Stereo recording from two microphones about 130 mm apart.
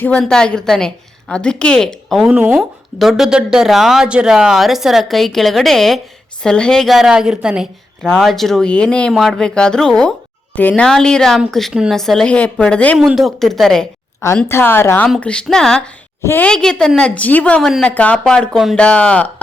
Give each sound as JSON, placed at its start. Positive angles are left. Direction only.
{"t": 0.2, "sound": "a woman's voice", "side_deg": 5}
{"t": 13.0, "sound": "a woman's voice", "side_deg": 0}
{"t": 14.4, "sound": "a woman's voice", "side_deg": 20}
{"t": 16.2, "sound": "a woman's voice", "side_deg": 15}
{"t": 16.5, "sound": "a woman's voice", "side_deg": 5}